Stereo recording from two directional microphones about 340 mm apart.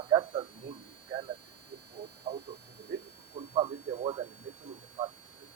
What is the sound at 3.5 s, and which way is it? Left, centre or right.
Speech, centre.